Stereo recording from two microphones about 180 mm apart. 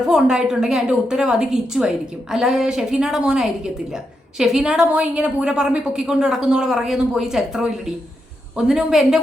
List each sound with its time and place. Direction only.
0.0 s a woman's voice: 5° right (ahead or behind)